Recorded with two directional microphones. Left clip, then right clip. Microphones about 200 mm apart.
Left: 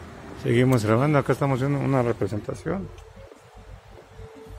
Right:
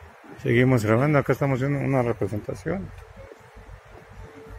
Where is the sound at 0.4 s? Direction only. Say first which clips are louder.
Right 1 dB; 5° left (ahead or behind).